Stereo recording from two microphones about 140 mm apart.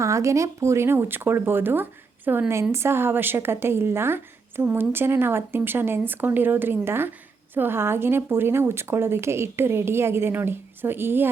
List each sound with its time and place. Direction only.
0.0 s a woman's voice: 20° right (ahead or behind)